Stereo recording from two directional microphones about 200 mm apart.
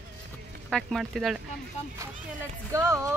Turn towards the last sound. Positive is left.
turn(degrees=-15)  # may be behind; listen again after turning